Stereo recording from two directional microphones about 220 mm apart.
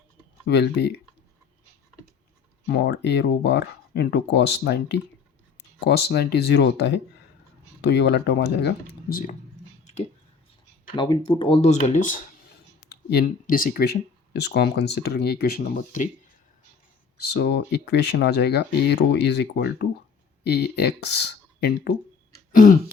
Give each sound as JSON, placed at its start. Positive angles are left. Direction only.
{"t": 0.4, "sound": "speech", "side_deg": 50}
{"t": 2.6, "sound": "speech", "side_deg": 50}
{"t": 9.8, "sound": "a sound", "side_deg": 30}
{"t": 10.9, "sound": "speech", "side_deg": 20}
{"t": 12.9, "sound": "speech", "side_deg": 45}
{"t": 17.3, "sound": "speech", "side_deg": 50}
{"t": 22.5, "sound": "a sound", "side_deg": 40}